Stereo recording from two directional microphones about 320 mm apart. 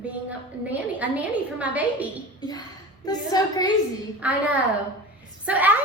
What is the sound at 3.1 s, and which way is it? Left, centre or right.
Speech, centre.